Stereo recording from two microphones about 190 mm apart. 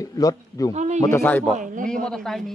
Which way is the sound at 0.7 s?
35° right (ahead or behind).